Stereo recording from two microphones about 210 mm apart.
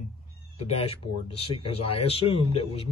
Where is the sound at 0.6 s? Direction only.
30° left (ahead or behind).